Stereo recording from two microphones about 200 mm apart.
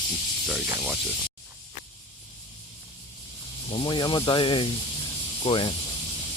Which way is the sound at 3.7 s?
25° left (ahead or behind).